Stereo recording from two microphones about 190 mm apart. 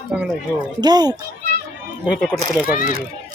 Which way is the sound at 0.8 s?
20° right (ahead or behind).